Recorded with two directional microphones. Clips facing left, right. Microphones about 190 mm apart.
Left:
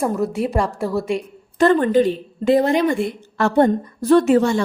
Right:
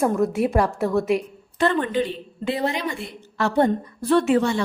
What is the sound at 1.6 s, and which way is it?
A woman's voice, 40° left (ahead or behind).